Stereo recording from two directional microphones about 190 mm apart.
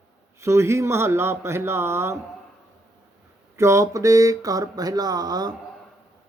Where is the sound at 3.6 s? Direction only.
15° right (ahead or behind).